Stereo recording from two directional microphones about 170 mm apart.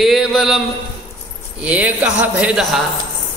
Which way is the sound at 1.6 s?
5° right (ahead or behind).